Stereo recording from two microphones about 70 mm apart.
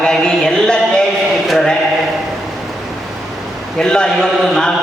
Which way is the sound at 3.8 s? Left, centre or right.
Centre.